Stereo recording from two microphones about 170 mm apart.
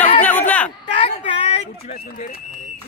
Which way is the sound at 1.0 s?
35° left (ahead or behind).